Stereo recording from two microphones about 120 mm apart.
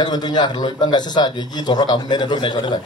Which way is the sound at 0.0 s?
35° left (ahead or behind).